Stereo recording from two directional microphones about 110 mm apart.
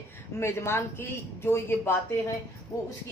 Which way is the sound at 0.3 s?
25° left (ahead or behind).